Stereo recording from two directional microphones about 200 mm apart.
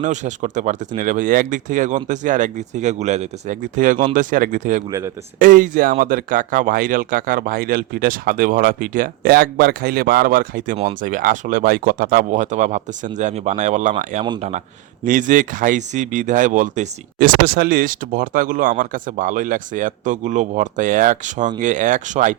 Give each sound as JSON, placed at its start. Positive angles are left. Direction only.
{"t": 0.0, "sound": "speech", "side_deg": -40}
{"t": 4.9, "sound": "speech", "side_deg": -15}
{"t": 5.4, "sound": "speech", "side_deg": -40}